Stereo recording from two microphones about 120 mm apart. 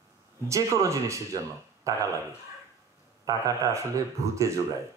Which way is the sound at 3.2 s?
25° right (ahead or behind).